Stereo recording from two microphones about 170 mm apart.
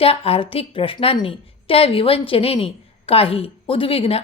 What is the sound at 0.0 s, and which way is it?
A woman's voice, 35° left (ahead or behind).